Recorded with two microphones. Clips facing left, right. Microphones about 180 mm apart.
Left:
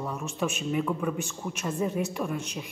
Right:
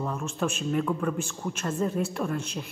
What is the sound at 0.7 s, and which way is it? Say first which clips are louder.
A woman's voice: right 1 dB; 5° left (ahead or behind).